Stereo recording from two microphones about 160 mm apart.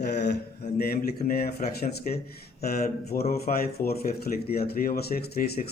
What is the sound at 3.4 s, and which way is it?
Speech, 75° left (ahead or behind).